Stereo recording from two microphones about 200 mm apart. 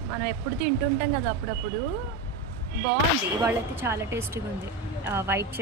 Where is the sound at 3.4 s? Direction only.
10° right (ahead or behind).